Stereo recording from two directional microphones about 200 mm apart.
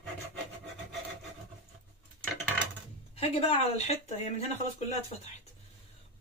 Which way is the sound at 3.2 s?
30° left (ahead or behind).